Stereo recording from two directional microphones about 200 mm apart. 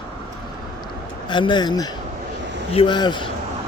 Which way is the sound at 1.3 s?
25° left (ahead or behind).